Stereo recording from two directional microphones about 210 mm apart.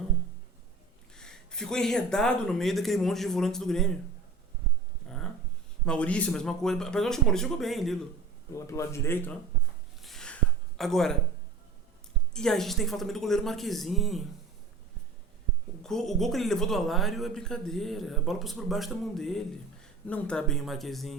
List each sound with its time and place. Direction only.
1.1 s speech: 5° left (ahead or behind)
5.0 s a sound: centre (ahead or behind)
5.8 s speech: 5° left (ahead or behind)
8.5 s speech: 15° left (ahead or behind)
10.0 s a sound: centre (ahead or behind)
12.3 s speech: 5° left (ahead or behind)
15.8 s speech: centre (ahead or behind)